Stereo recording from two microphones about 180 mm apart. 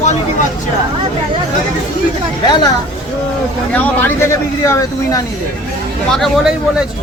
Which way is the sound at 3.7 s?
10° left (ahead or behind).